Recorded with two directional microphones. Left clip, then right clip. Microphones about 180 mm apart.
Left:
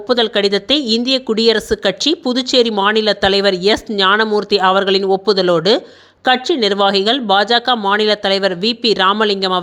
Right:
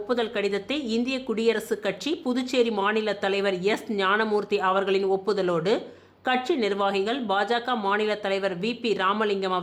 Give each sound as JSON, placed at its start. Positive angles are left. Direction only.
{"t": 0.1, "sound": "speech", "side_deg": 35}